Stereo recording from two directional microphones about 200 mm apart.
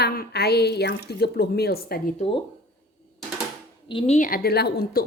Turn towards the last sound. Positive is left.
turn(degrees=50)  # may be behind; listen again after turning